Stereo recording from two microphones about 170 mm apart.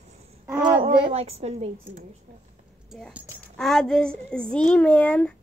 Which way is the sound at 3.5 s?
5° left (ahead or behind).